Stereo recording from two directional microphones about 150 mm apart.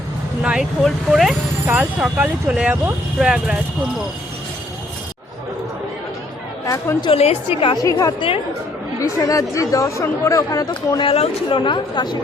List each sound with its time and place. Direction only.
0.4 s speech: 5° right (ahead or behind)
6.7 s speech: 25° left (ahead or behind)
7.1 s a woman's voice: 40° left (ahead or behind)
7.8 s speech: 25° left (ahead or behind)